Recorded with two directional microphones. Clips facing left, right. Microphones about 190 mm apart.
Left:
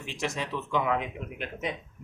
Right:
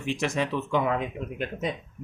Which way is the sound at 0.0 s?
60° right (ahead or behind).